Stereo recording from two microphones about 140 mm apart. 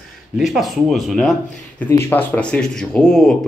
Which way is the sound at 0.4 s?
Centre (ahead or behind).